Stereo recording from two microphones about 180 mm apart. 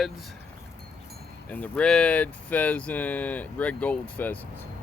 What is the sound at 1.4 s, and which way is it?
Speech, 10° left (ahead or behind).